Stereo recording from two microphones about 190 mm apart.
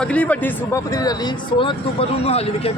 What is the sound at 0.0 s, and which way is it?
Speech, 5° left (ahead or behind).